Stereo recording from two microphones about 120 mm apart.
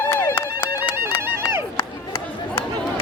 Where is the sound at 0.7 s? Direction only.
20° right (ahead or behind).